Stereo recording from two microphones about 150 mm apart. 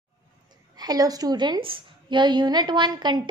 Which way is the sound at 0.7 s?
25° right (ahead or behind).